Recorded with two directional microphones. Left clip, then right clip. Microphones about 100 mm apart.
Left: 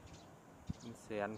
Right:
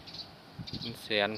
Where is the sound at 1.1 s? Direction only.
15° right (ahead or behind).